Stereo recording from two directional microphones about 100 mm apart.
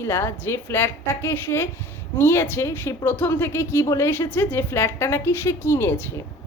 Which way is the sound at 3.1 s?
20° left (ahead or behind).